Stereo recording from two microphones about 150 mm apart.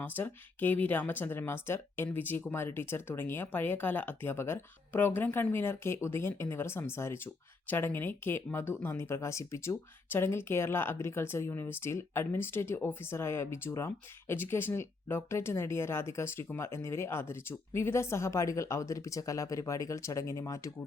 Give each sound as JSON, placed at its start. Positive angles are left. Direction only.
{"t": 0.0, "sound": "speech", "side_deg": 15}